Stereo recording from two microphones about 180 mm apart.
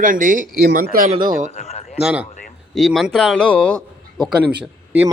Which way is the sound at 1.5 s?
40° left (ahead or behind).